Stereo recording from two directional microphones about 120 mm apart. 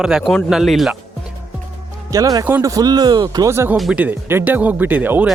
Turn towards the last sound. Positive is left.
turn(degrees=-15)  # may be behind; listen again after turning